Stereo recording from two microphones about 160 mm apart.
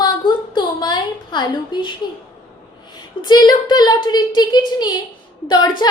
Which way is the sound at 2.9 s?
25° left (ahead or behind).